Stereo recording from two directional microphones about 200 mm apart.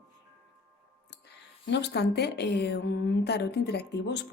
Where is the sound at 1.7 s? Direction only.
60° left (ahead or behind).